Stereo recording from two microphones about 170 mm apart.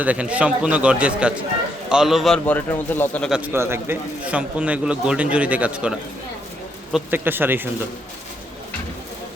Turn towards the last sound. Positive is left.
turn(degrees=-10)  # may be behind; listen again after turning